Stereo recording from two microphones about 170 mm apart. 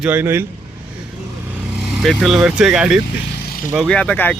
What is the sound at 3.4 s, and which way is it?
Vehicle, 60° left (ahead or behind).